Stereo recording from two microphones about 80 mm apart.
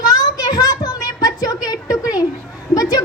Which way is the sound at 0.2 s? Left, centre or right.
Left.